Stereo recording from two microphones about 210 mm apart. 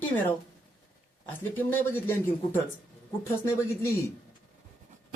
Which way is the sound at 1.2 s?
10° left (ahead or behind).